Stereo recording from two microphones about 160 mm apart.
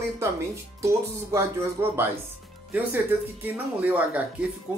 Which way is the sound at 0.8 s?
15° right (ahead or behind).